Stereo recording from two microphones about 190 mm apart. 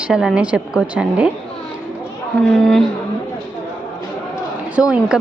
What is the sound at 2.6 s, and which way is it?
Speech, 5° left (ahead or behind).